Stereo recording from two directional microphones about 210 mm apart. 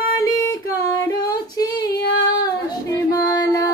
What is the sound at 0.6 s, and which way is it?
Female singing, 15° left (ahead or behind).